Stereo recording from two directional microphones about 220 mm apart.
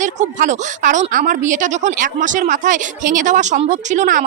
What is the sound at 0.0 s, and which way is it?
Speech, 35° right (ahead or behind).